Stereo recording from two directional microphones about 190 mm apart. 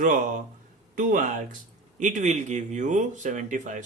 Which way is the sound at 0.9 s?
45° right (ahead or behind).